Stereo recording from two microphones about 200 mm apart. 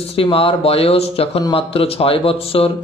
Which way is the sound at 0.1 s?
25° left (ahead or behind).